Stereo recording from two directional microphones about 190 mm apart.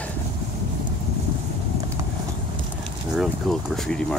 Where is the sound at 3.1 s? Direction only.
Centre (ahead or behind).